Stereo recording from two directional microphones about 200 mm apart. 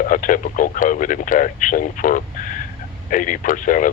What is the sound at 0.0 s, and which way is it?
Speech, 40° left (ahead or behind).